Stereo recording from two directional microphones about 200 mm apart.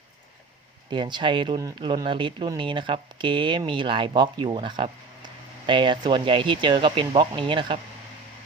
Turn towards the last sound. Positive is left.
turn(degrees=-25)  # may be behind; listen again after turning